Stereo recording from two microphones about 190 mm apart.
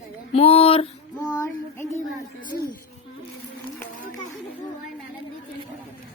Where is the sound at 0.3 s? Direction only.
30° left (ahead or behind).